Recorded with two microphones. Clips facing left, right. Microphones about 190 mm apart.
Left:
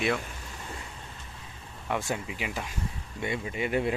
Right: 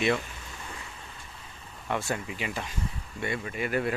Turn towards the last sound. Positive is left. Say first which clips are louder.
# left 1 dB
turn(degrees=20)  # may be behind; listen again after turning